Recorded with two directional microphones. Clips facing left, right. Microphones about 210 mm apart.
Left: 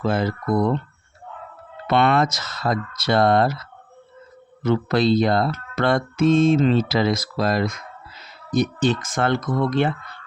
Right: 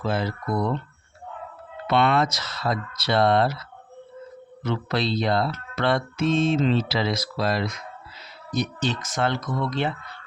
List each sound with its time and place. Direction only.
0.0 s speech: 50° left (ahead or behind)
1.9 s speech: 50° left (ahead or behind)